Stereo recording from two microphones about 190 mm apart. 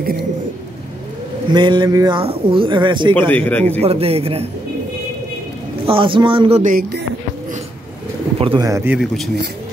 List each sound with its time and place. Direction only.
1.5 s speech: 25° right (ahead or behind)
3.2 s a man's voice: 10° left (ahead or behind)
3.8 s a man's voice: 30° right (ahead or behind)
5.9 s speech: 25° right (ahead or behind)
6.6 s speech: 50° right (ahead or behind)
8.4 s speech: 25° right (ahead or behind)
8.6 s speech: 15° right (ahead or behind)